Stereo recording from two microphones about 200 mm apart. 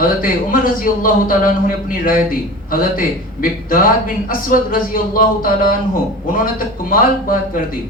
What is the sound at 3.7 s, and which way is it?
A man's voice, 45° left (ahead or behind).